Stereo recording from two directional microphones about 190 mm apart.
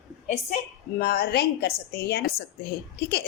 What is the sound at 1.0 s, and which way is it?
A woman's voice, 55° left (ahead or behind).